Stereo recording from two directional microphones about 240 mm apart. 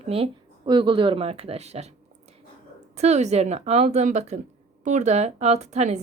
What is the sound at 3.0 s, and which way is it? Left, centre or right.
A woman's voice, right.